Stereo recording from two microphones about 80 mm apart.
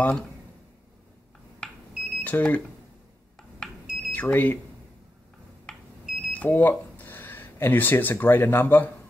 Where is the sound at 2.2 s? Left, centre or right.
Left.